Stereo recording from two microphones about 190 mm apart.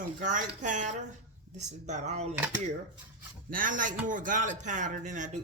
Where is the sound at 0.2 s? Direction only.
40° right (ahead or behind).